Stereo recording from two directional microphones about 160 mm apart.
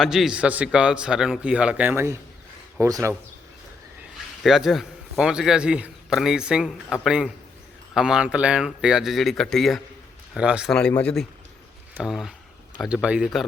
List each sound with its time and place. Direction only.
0.0 s a man's voice: centre (ahead or behind); by 3.2 s 20° right (ahead or behind)
4.4 s a man's voice: centre (ahead or behind)
10.8 s a man's voice: 5° left (ahead or behind)